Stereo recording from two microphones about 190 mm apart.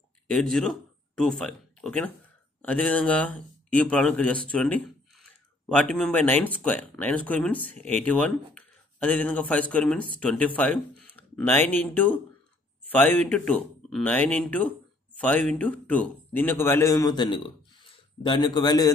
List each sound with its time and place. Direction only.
0.3 s a man's voice: centre (ahead or behind); by 18.9 s 20° left (ahead or behind)